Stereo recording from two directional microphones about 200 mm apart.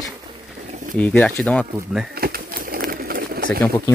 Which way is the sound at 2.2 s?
50° right (ahead or behind).